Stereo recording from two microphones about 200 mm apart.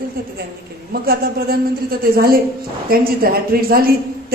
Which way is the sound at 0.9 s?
50° right (ahead or behind).